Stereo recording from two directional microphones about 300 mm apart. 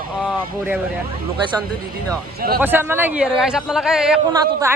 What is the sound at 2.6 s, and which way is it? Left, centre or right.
Speech, centre.